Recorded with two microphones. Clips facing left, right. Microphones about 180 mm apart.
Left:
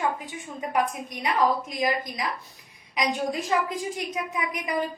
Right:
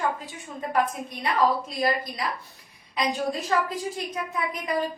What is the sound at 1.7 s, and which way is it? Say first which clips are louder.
A woman's voice: right 1 dB; 15° left (ahead or behind).